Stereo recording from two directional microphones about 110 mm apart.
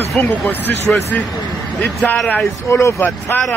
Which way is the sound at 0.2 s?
15° left (ahead or behind).